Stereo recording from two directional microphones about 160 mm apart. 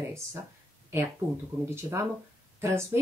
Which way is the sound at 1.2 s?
15° right (ahead or behind).